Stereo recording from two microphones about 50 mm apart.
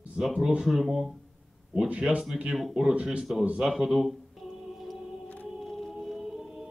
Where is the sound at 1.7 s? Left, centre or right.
Right.